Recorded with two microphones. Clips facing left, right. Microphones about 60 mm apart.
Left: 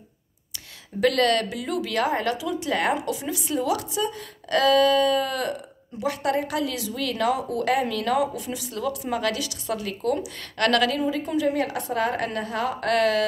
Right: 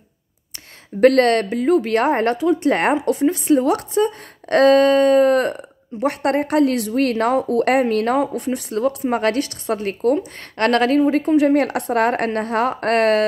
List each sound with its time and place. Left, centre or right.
1.0 s a woman's voice: right
11.0 s a woman's voice: right